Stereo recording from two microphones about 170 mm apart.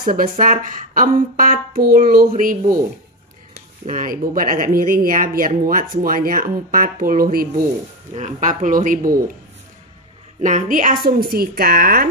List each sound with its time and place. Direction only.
0.0 s speech: 55° right (ahead or behind)
3.8 s speech: 50° right (ahead or behind)
8.1 s speech: 45° right (ahead or behind)
10.4 s speech: 45° right (ahead or behind)
11.1 s speech: 65° right (ahead or behind)